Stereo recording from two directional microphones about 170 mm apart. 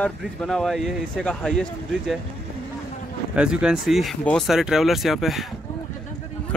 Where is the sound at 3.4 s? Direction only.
5° right (ahead or behind).